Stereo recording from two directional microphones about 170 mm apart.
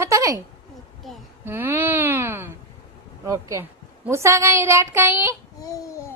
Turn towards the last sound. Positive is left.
turn(degrees=20)  # may be behind; listen again after turning